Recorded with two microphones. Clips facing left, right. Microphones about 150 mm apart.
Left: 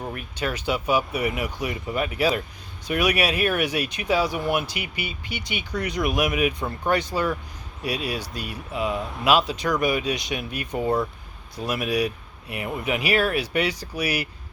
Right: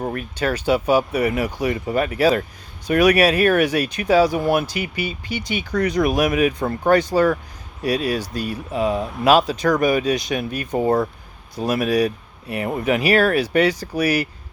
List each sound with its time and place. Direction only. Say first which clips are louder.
0.0 s speech: right 6 dB; 40° right (ahead or behind)